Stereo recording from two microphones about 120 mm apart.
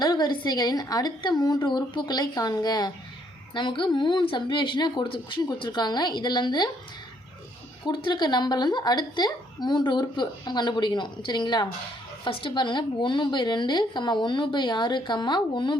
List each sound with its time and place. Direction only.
0.0 s a woman's voice: 35° left (ahead or behind)
7.9 s a woman's voice: 40° left (ahead or behind)